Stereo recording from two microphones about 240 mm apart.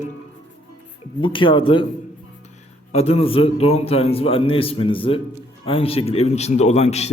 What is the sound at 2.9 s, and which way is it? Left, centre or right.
A man's voice, left.